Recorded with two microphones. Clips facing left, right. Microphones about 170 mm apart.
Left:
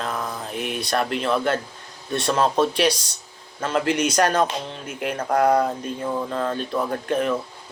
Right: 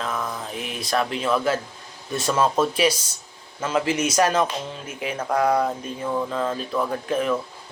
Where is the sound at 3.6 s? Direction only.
5° right (ahead or behind).